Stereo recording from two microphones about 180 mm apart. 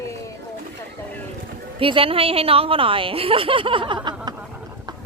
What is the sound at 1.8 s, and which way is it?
Speech, 30° right (ahead or behind).